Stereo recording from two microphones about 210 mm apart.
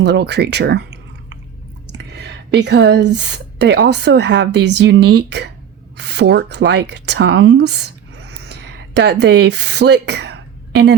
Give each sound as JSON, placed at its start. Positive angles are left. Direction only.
{"t": 0.0, "sound": "speech", "side_deg": -55}
{"t": 1.9, "sound": "speech", "side_deg": -55}